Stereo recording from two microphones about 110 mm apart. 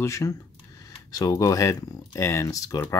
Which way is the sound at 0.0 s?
30° left (ahead or behind).